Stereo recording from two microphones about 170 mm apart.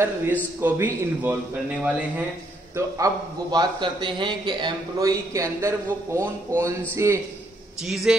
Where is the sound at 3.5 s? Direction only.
25° right (ahead or behind).